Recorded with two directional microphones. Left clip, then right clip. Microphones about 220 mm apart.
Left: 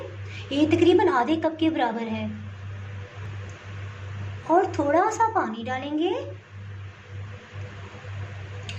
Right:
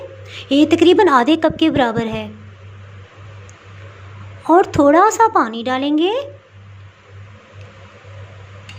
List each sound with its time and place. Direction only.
0.3 s a woman's voice: 45° right (ahead or behind)
4.4 s a woman's voice: 50° right (ahead or behind)